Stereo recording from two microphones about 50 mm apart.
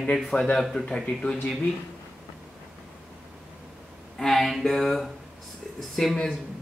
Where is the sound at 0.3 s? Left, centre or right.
Left.